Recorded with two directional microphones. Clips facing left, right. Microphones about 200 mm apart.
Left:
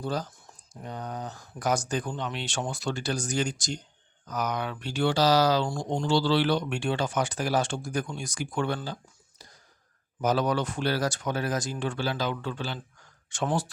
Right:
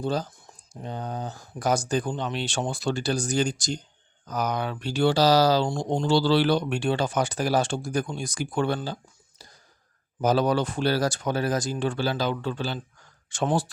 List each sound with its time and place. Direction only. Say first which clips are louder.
0.0 s speech: right 4 dB; 25° right (ahead or behind)
5.6 s speech: right 4 dB; 20° right (ahead or behind)
6.1 s speech: right 3 dB; 35° right (ahead or behind)
9.4 s a sound: right 1 dB; 30° right (ahead or behind)
10.2 s speech: right 3 dB; 30° right (ahead or behind)